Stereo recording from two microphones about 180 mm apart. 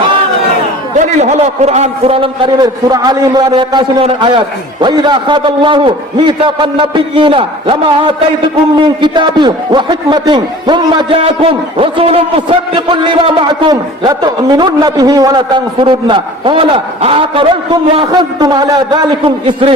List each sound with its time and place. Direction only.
0.9 s a man's voice: 40° right (ahead or behind)